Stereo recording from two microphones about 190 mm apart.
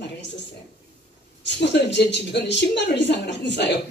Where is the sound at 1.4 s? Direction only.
70° left (ahead or behind).